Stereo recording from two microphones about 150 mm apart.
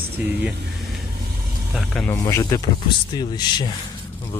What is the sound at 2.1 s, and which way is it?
Speech, 20° left (ahead or behind).